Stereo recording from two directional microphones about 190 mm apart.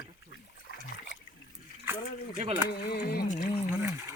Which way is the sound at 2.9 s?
55° left (ahead or behind).